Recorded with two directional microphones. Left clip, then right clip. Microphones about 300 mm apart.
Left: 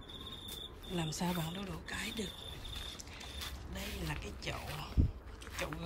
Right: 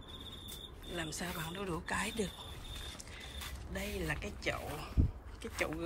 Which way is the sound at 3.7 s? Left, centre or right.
Centre.